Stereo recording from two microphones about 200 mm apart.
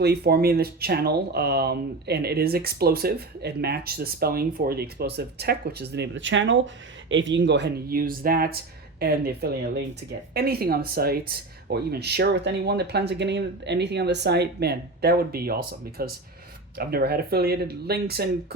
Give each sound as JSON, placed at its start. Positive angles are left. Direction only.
{"t": 0.0, "sound": "speech", "side_deg": -50}